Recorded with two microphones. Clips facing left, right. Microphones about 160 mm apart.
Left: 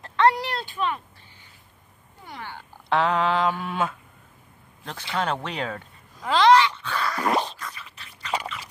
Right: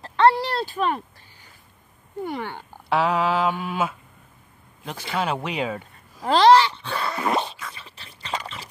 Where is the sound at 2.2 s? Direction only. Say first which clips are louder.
Right 10 dB; 60° right (ahead or behind).